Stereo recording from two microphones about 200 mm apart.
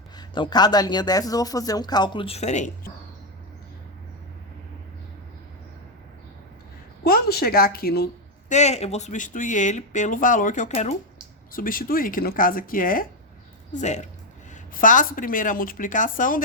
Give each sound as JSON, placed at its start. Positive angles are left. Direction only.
{"t": 0.2, "sound": "speech", "side_deg": 20}
{"t": 7.0, "sound": "speech", "side_deg": 50}
{"t": 8.4, "sound": "speech", "side_deg": 35}